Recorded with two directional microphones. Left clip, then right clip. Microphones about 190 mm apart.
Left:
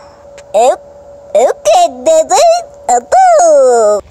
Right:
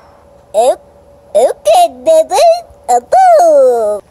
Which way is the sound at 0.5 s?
10° left (ahead or behind).